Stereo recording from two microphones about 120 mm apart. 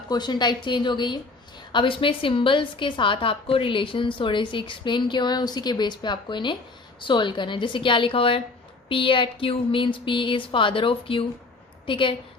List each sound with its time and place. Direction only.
0.1 s a woman's voice: 35° left (ahead or behind)